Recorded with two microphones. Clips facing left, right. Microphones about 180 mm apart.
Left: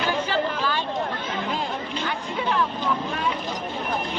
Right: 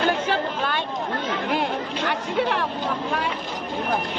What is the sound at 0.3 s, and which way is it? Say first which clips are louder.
Chatter: even; 60° right (ahead or behind).